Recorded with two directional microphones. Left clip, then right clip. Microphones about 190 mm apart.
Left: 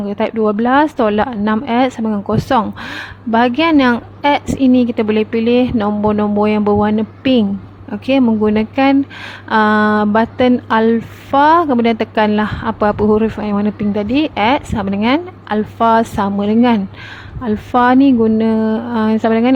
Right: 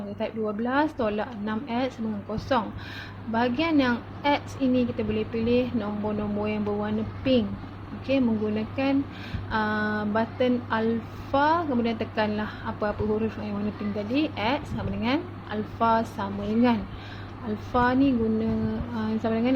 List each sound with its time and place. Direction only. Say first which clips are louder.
0.2 s speech: left 14 dB; 45° left (ahead or behind)